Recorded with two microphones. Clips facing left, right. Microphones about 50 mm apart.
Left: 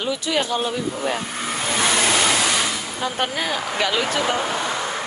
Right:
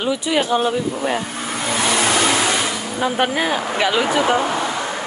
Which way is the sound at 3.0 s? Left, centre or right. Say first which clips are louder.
Right 6 dB; centre.